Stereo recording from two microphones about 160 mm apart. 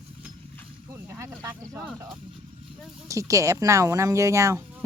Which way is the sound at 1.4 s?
20° right (ahead or behind).